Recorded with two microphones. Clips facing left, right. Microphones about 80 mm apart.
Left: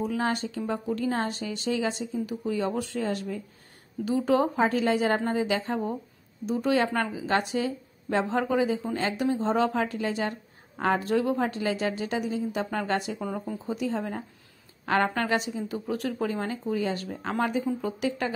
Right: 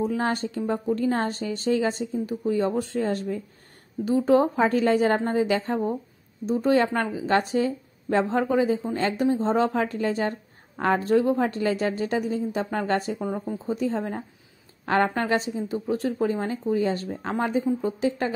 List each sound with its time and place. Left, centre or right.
0.0 s a woman's voice: right
13.2 s a woman's voice: right